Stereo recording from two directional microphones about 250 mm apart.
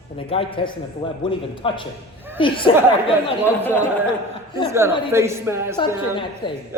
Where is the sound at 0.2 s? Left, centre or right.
Left.